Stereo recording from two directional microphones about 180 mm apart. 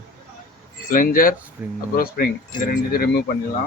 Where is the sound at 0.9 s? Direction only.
50° left (ahead or behind).